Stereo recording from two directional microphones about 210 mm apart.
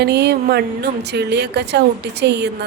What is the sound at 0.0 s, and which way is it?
Speech, 50° right (ahead or behind).